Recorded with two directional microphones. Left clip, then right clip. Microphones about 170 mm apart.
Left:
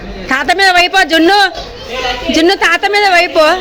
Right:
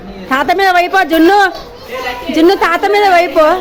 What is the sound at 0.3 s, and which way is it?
A woman's voice, 5° right (ahead or behind).